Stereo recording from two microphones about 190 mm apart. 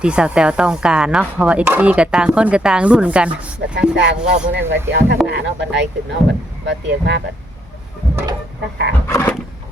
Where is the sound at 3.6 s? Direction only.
70° right (ahead or behind).